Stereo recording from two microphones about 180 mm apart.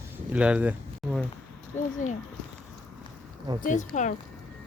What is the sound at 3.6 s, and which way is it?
Speech, 45° left (ahead or behind).